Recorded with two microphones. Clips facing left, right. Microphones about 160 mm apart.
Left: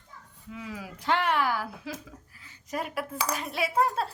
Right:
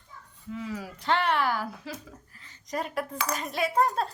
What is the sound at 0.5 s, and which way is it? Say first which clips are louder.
A woman's voice: right 4 dB; 10° left (ahead or behind).